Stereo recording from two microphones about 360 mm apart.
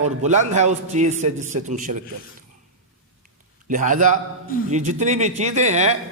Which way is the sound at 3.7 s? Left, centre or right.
Right.